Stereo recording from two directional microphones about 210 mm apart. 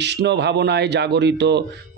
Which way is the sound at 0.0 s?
55° right (ahead or behind).